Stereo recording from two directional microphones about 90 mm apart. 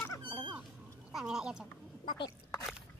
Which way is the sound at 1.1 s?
5° right (ahead or behind).